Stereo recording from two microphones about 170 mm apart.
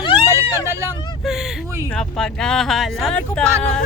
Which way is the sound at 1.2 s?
Centre (ahead or behind).